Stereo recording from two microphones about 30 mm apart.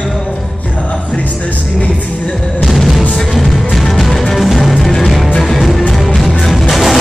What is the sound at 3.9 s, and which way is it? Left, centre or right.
Music, centre.